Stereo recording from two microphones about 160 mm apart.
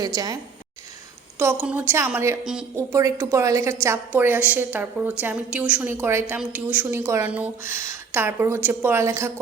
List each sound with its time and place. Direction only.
0.0 s a woman's voice: 25° right (ahead or behind)
1.6 s a woman's voice: 10° right (ahead or behind)
2.4 s speech: 5° right (ahead or behind)
2.7 s a woman's voice: 20° right (ahead or behind)